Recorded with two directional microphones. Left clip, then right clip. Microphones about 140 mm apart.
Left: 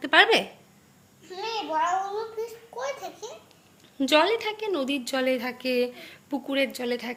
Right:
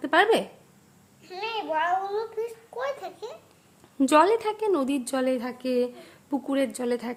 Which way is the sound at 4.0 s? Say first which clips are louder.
Right 2 dB; 55° right (ahead or behind).